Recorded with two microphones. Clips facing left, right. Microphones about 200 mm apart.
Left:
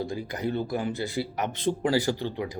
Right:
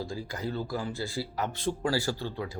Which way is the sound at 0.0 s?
20° left (ahead or behind).